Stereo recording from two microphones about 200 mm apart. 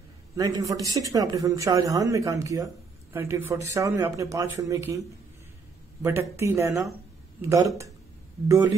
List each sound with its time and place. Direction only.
0.4 s speech: 15° right (ahead or behind)
6.0 s speech: 15° right (ahead or behind)